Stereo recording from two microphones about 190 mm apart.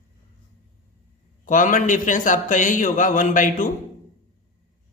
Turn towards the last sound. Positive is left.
turn(degrees=45)  # may be behind; listen again after turning